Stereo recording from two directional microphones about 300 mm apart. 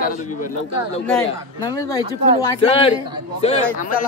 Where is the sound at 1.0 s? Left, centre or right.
Centre.